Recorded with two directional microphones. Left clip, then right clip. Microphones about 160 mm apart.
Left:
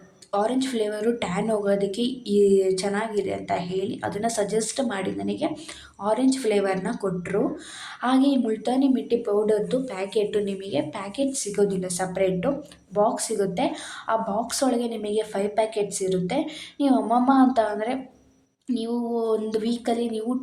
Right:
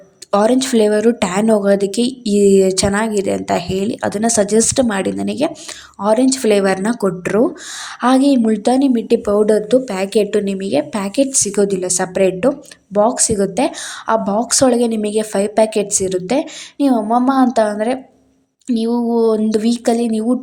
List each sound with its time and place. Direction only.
0.3 s speech: 60° right (ahead or behind)